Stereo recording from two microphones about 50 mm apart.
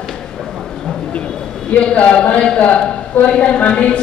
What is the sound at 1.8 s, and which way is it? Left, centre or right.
A woman's voice, left.